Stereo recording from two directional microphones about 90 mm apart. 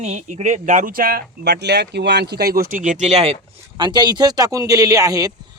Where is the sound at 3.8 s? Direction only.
55° right (ahead or behind).